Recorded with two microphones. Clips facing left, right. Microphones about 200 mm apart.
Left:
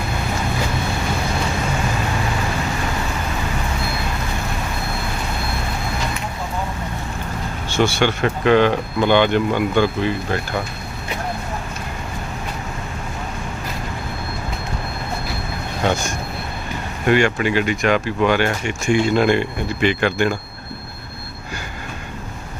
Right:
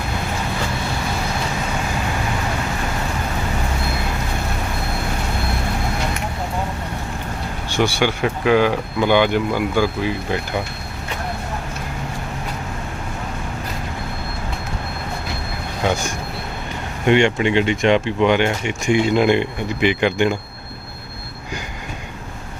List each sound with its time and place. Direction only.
7.7 s speech: 15° right (ahead or behind)
15.8 s speech: 10° right (ahead or behind)
17.1 s speech: 25° right (ahead or behind)